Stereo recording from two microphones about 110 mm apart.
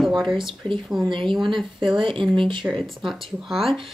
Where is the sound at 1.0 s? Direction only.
50° right (ahead or behind).